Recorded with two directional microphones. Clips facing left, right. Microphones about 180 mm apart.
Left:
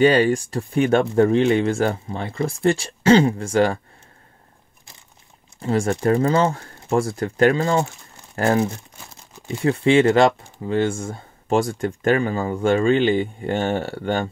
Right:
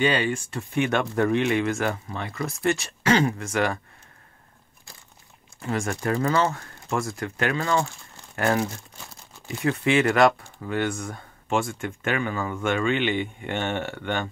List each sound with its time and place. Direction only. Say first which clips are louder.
0.0 s speech: left 8 dB; 40° left (ahead or behind)
5.6 s speech: left 7 dB; 30° left (ahead or behind)